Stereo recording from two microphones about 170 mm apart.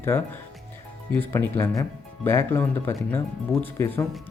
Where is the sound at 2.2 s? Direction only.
15° left (ahead or behind).